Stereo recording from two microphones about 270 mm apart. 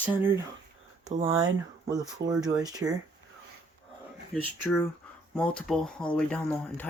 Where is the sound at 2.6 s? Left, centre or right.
Centre.